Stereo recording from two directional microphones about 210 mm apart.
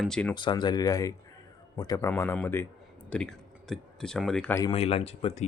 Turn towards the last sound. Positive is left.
turn(degrees=30)  # may be behind; listen again after turning